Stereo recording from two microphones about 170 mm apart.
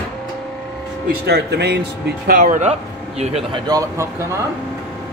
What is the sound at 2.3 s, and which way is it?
Speech, 50° right (ahead or behind).